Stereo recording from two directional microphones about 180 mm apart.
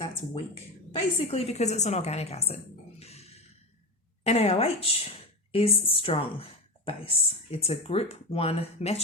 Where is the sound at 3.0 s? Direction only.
35° left (ahead or behind).